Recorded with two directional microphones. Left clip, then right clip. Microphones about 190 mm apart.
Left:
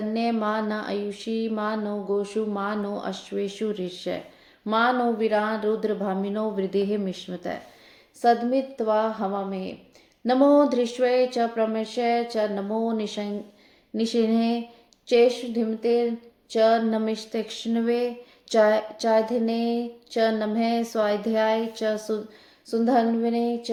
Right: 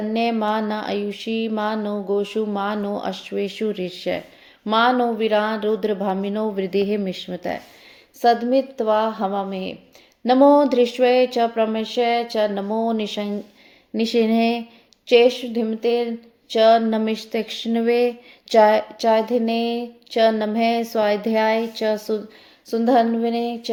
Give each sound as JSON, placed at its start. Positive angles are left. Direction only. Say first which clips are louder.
{"t": 0.1, "sound": "speech", "louder": "right 5 dB", "side_deg": -30}